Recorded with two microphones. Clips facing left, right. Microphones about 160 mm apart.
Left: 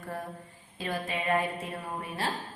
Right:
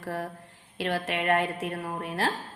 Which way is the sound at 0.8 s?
90° right.